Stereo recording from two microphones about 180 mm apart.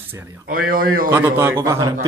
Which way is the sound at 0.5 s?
50° right (ahead or behind).